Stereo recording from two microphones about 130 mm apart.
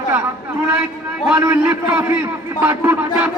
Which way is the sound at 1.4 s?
15° right (ahead or behind).